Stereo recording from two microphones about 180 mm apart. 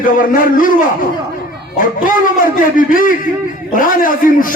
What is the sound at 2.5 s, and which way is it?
A man's voice, 50° left (ahead or behind).